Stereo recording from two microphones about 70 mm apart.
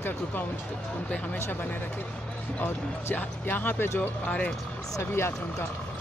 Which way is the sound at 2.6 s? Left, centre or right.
Left.